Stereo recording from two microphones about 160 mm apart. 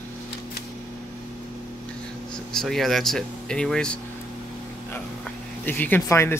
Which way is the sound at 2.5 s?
Centre (ahead or behind).